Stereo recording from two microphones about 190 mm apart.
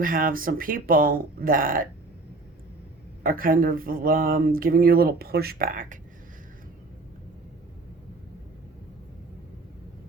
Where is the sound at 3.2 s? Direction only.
50° right (ahead or behind).